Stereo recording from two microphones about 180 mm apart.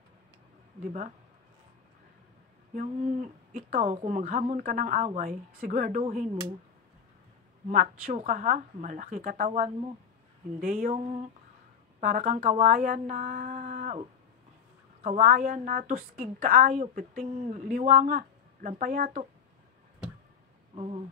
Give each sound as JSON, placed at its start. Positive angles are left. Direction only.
{"t": 2.7, "sound": "a woman's voice", "side_deg": -50}
{"t": 7.6, "sound": "a woman's voice", "side_deg": -45}
{"t": 15.0, "sound": "a woman's voice", "side_deg": -50}
{"t": 20.7, "sound": "speech", "side_deg": -35}